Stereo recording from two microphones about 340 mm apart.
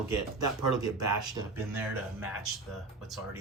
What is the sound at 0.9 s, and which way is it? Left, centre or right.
Speech, centre.